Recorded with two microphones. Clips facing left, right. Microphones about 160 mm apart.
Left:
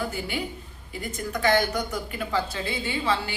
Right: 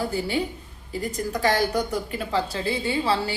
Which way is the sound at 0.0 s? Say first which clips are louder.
Right 4 dB; 35° right (ahead or behind).